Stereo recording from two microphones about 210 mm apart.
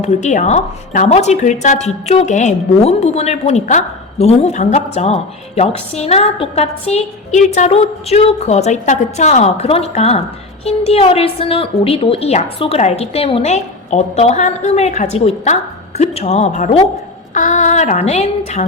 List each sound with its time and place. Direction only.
0.0 s a woman's voice: 35° left (ahead or behind)